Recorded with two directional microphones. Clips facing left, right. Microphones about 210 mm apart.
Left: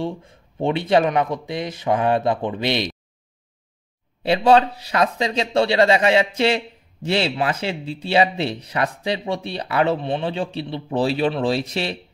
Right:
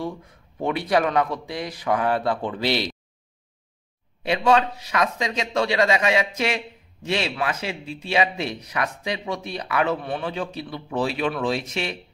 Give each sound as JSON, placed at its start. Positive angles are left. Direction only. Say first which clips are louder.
{"t": 0.0, "sound": "a man's voice", "louder": "left 3 dB", "side_deg": 25}
{"t": 4.2, "sound": "speech", "louder": "left 4 dB", "side_deg": 35}